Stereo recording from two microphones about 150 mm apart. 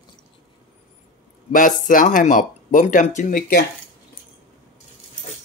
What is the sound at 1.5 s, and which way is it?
Speech, 65° left (ahead or behind).